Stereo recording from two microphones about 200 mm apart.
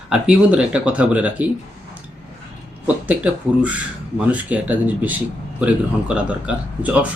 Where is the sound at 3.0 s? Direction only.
5° right (ahead or behind).